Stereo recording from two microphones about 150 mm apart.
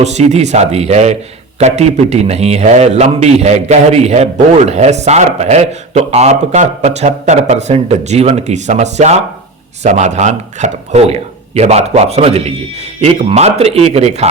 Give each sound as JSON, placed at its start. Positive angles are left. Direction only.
{"t": 0.0, "sound": "a man's voice", "side_deg": -50}